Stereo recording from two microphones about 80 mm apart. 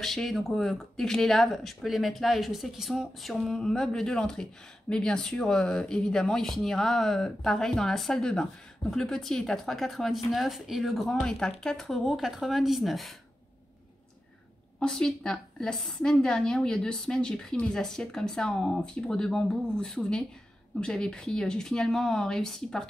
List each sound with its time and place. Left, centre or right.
0.0 s speech: centre
14.8 s a woman's voice: centre